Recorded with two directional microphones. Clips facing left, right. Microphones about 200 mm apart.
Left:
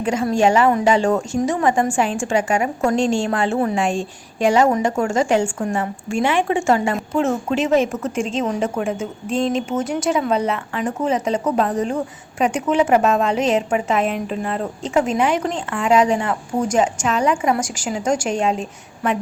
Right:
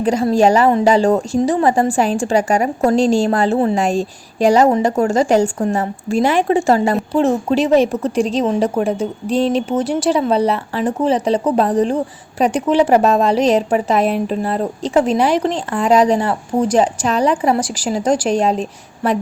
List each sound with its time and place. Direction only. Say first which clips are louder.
0.0 s a woman's voice: right 4 dB; 35° right (ahead or behind)